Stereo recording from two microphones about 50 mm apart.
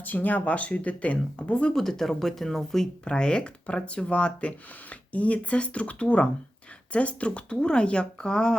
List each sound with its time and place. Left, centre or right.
0.0 s speech: left
1.7 s speech: centre